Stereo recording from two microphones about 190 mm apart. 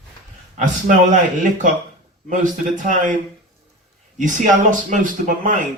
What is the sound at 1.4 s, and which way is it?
Speech, 40° right (ahead or behind).